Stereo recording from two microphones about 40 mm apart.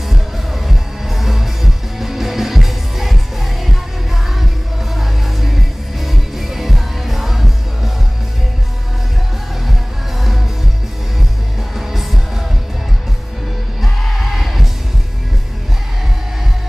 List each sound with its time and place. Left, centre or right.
0.1 s music: centre
4.9 s music: centre
11.7 s music: centre
14.0 s music: centre